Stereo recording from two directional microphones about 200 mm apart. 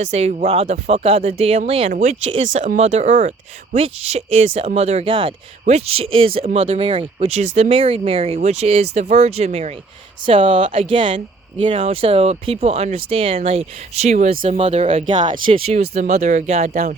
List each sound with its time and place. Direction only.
0.0 s speech: 35° right (ahead or behind)
1.9 s speech: 45° right (ahead or behind)
2.2 s speech: 35° right (ahead or behind)